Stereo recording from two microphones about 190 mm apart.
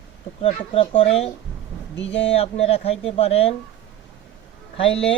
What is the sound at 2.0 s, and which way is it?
Speech, 75° left (ahead or behind).